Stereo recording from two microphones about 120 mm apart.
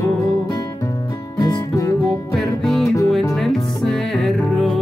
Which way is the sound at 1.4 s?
30° left (ahead or behind).